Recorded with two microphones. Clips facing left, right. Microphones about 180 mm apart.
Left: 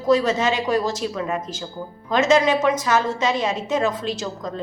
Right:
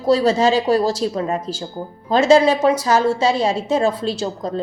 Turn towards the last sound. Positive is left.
turn(degrees=-30)  # may be behind; listen again after turning